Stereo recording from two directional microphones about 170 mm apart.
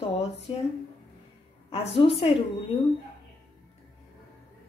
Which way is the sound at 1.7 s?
35° left (ahead or behind).